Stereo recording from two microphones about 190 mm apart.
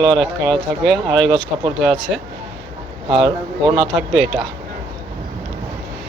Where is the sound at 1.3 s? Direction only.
25° right (ahead or behind).